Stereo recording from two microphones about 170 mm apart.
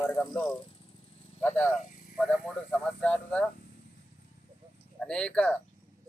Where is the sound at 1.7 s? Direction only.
50° left (ahead or behind).